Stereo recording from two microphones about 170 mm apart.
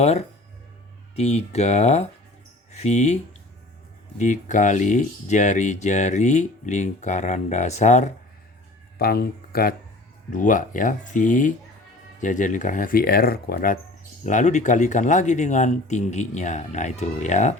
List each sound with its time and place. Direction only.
0.0 s speech: 40° left (ahead or behind)
4.2 s speech: 45° left (ahead or behind)
9.0 s speech: 65° left (ahead or behind)
10.3 s speech: 50° left (ahead or behind)
14.3 s speech: 45° left (ahead or behind)